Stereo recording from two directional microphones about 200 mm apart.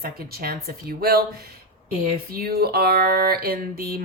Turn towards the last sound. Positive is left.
turn(degrees=-50)  # may be behind; listen again after turning